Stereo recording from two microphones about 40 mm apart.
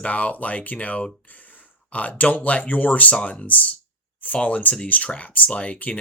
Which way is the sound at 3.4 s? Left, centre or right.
Left.